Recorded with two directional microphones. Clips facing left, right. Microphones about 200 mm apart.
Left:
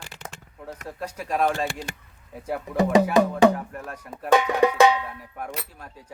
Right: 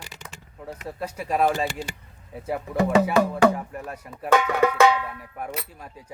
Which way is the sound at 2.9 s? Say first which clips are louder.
Left 1 dB; 15° left (ahead or behind).